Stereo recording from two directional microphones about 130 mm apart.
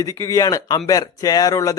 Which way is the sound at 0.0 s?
20° left (ahead or behind).